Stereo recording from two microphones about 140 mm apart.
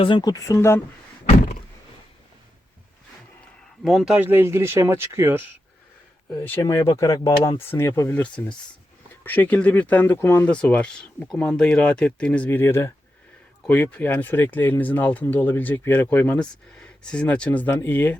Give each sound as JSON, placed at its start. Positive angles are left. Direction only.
{"t": 0.0, "sound": "speech", "side_deg": 30}
{"t": 3.8, "sound": "speech", "side_deg": -5}
{"t": 6.4, "sound": "speech", "side_deg": 20}
{"t": 9.2, "sound": "speech", "side_deg": 10}